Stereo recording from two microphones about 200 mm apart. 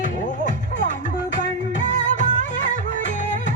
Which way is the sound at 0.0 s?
40° left (ahead or behind).